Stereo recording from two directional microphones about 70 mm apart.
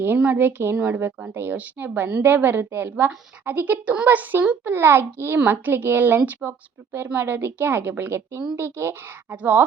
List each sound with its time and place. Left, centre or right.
0.2 s a woman's voice: right
9.3 s speech: right